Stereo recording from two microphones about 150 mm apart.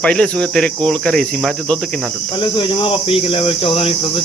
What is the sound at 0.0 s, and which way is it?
Cricket, 5° left (ahead or behind).